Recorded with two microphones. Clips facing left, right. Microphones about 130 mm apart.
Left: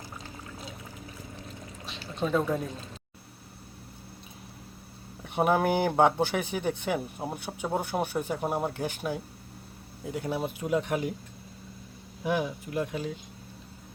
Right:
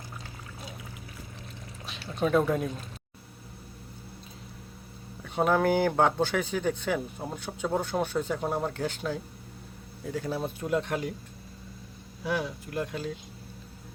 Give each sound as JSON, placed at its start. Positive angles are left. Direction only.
{"t": 1.9, "sound": "pour", "side_deg": -10}
{"t": 5.2, "sound": "speech", "side_deg": 15}
{"t": 12.2, "sound": "speech", "side_deg": 15}